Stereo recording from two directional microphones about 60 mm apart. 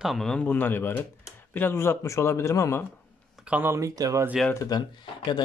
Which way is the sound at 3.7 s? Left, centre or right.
Right.